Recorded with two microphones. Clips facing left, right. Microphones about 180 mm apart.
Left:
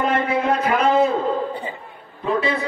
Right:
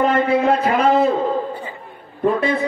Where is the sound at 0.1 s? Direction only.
35° right (ahead or behind).